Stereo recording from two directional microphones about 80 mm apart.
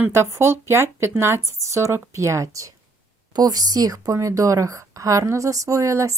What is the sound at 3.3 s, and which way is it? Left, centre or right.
A woman's voice, right.